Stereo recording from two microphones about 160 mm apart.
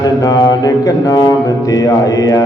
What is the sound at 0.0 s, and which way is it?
Mantra, 25° left (ahead or behind).